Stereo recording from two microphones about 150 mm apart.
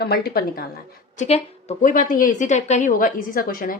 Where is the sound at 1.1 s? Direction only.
45° left (ahead or behind).